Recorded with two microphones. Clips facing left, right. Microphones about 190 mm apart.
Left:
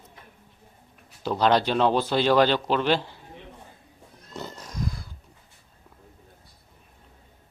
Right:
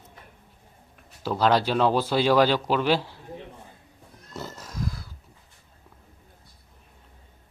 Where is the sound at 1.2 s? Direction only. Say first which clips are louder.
Even; 5° right (ahead or behind).